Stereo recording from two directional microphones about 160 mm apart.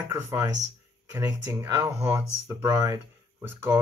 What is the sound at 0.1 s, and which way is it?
Speech, 20° right (ahead or behind).